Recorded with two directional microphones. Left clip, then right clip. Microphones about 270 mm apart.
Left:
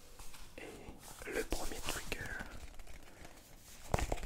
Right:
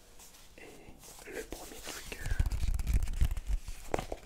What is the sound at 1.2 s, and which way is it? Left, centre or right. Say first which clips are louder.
Whispering: left 3 dB; centre.